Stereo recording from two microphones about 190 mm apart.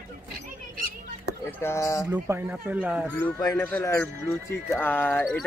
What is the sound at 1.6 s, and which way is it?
Speech, 15° left (ahead or behind).